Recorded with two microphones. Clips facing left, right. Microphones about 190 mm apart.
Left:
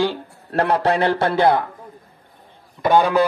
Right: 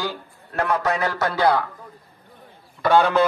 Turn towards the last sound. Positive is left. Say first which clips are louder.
# left 1 dB
turn(degrees=15)  # may be behind; listen again after turning